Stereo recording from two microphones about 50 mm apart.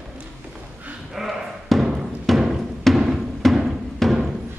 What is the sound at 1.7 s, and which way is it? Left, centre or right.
Music, centre.